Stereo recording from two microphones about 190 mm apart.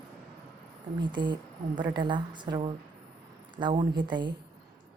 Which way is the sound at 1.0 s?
25° right (ahead or behind).